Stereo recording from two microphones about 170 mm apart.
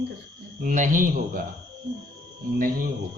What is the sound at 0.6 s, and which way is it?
Speech, 50° right (ahead or behind).